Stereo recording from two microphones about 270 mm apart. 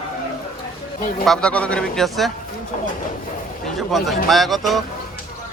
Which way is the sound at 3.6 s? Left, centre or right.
Centre.